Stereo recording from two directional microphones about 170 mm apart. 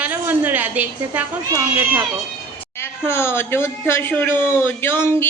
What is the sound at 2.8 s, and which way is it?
Speech, 15° left (ahead or behind).